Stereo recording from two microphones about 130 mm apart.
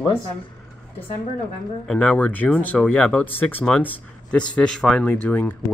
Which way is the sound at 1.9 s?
10° left (ahead or behind).